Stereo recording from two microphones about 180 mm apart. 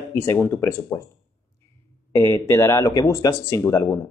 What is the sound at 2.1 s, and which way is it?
Speech, 15° left (ahead or behind).